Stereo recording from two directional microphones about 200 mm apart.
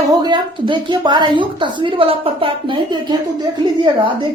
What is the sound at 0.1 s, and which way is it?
A woman's voice, 20° right (ahead or behind).